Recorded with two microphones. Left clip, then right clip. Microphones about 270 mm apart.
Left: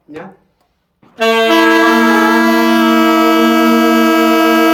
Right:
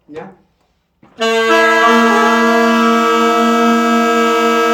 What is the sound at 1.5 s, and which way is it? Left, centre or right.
Saxophone, left.